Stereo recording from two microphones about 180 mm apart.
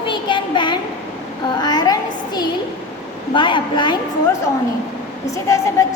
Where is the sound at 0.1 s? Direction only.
25° left (ahead or behind).